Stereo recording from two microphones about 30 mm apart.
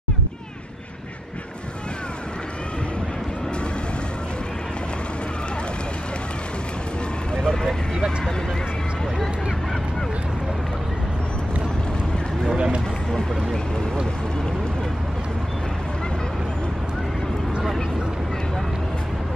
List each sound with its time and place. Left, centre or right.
7.3 s vehicle: centre